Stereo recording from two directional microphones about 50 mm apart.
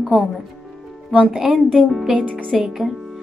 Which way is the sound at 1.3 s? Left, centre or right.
Centre.